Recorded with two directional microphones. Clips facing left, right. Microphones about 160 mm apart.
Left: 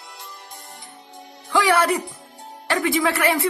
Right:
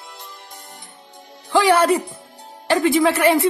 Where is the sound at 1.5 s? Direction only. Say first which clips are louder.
Right 4 dB; 20° right (ahead or behind).